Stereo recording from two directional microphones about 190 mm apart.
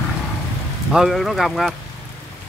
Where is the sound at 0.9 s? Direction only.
Centre (ahead or behind).